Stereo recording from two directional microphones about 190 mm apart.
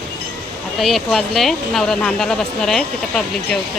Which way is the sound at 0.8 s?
Centre (ahead or behind).